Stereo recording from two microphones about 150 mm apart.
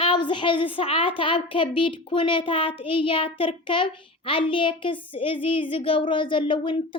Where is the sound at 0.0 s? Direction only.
35° left (ahead or behind).